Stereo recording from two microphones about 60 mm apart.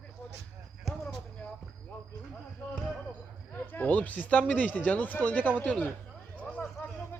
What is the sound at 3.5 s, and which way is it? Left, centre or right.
Speech, left.